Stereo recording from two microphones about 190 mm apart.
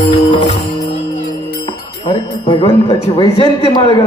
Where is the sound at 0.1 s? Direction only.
25° left (ahead or behind).